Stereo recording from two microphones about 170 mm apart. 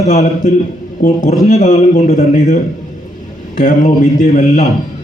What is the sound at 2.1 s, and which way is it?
Speech, 60° left (ahead or behind).